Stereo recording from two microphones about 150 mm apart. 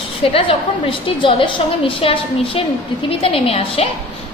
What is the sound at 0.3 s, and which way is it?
A woman's voice, 35° left (ahead or behind).